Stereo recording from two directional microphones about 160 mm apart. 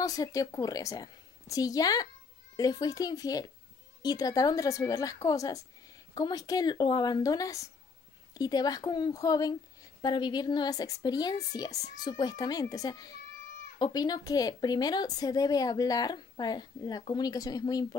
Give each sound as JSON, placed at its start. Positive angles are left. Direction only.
{"t": 0.0, "sound": "speech", "side_deg": 20}